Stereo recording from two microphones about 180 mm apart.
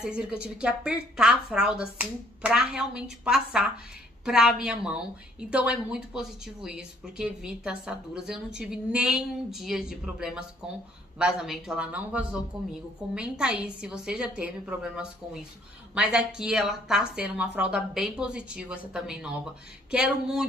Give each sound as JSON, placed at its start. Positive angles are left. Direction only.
{"t": 0.0, "sound": "a woman's voice", "side_deg": -5}